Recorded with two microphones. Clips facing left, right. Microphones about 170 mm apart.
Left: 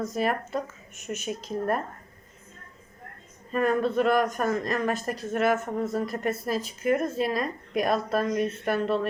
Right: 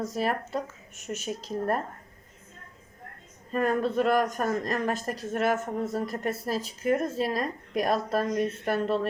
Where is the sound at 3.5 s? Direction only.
40° right (ahead or behind).